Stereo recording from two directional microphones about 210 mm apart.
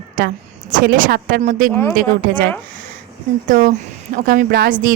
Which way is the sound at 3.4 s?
40° right (ahead or behind).